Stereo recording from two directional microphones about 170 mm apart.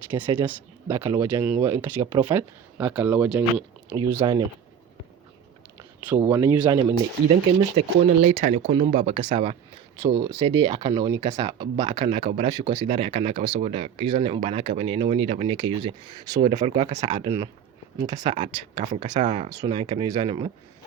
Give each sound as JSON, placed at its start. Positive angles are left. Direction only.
{"t": 0.1, "sound": "speech", "side_deg": -10}
{"t": 6.0, "sound": "speech", "side_deg": -10}
{"t": 7.6, "sound": "speech", "side_deg": -40}
{"t": 10.0, "sound": "speech", "side_deg": -20}
{"t": 12.9, "sound": "speech", "side_deg": -35}
{"t": 18.3, "sound": "speech", "side_deg": -35}